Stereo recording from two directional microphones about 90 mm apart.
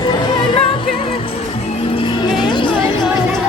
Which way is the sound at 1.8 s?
85° left.